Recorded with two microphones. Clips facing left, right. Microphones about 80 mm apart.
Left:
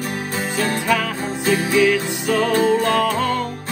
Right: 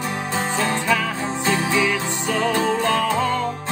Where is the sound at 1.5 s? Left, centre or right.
Right.